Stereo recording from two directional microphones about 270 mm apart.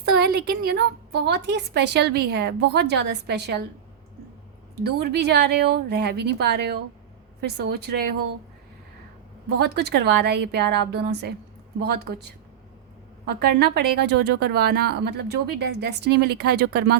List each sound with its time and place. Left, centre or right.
0.0 s a woman's voice: right
4.8 s a woman's voice: right
9.6 s a woman's voice: right
13.2 s a woman's voice: right